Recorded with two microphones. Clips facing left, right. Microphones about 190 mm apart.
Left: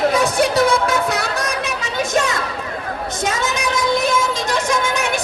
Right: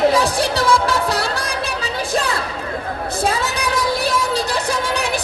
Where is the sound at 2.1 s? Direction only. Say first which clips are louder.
Left 2 dB; 35° right (ahead or behind).